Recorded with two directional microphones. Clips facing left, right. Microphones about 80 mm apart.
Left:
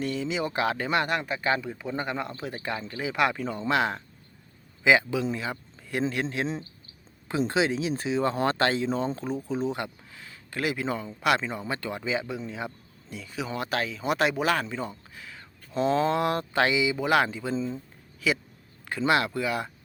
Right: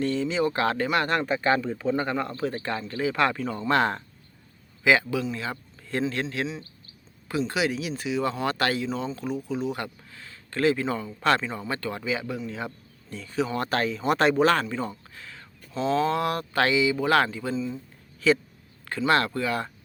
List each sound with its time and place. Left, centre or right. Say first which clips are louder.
0.0 s speech: right 4 dB; centre
4.8 s speech: even; centre
7.3 s speech: left 1 dB; left
15.7 s speech: even; left
17.5 s speech: even; left
18.3 s speech: right 6 dB; centre